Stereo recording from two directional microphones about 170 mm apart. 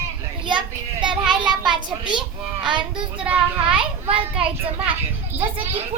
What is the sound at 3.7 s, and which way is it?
A child's voice, 30° right (ahead or behind).